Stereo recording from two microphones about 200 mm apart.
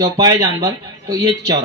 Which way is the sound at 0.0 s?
20° right (ahead or behind).